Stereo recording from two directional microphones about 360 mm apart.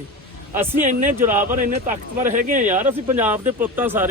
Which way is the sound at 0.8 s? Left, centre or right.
Right.